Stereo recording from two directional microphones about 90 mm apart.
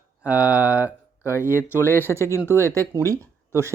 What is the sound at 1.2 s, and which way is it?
Speech, 30° left (ahead or behind).